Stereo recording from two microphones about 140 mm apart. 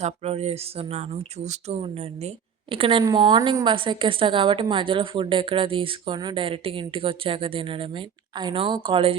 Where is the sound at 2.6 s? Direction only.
40° right (ahead or behind).